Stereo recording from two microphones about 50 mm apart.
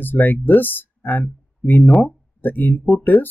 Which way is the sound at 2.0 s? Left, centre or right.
Left.